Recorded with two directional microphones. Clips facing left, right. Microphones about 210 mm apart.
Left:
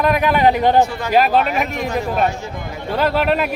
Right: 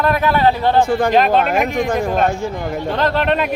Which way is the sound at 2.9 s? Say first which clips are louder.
Left 1 dB; 10° left (ahead or behind).